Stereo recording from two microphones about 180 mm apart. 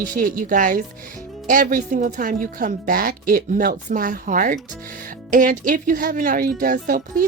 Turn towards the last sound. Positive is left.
turn(degrees=-50)  # may be behind; listen again after turning